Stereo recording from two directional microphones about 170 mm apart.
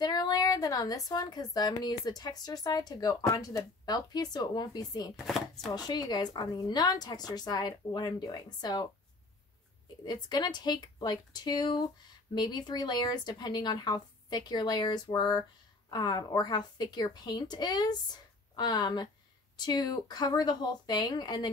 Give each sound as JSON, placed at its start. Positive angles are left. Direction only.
{"t": 0.0, "sound": "a woman's voice", "side_deg": 25}
{"t": 5.1, "sound": "chopping", "side_deg": 0}
{"t": 5.7, "sound": "a woman's voice", "side_deg": 25}
{"t": 10.0, "sound": "a woman's voice", "side_deg": 25}